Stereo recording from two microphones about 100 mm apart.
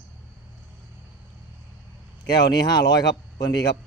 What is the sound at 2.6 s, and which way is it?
Speech, 40° left (ahead or behind).